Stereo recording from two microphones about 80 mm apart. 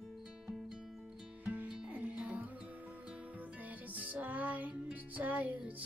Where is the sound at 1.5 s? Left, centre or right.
Centre.